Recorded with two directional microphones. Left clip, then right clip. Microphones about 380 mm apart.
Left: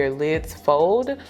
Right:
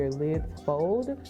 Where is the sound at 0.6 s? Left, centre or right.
Centre.